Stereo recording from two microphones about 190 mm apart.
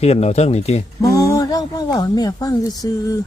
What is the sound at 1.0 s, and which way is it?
Speech, 20° left (ahead or behind).